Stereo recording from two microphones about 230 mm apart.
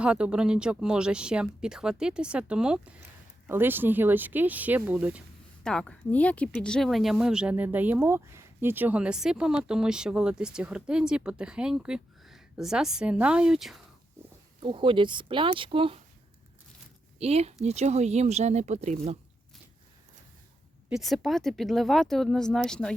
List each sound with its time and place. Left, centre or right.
0.0 s speech: centre
14.6 s speech: right
17.2 s speech: right
20.9 s speech: centre